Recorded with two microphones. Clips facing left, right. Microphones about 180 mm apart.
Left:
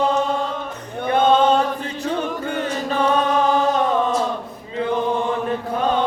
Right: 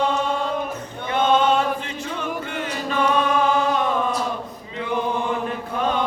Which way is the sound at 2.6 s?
40° left (ahead or behind).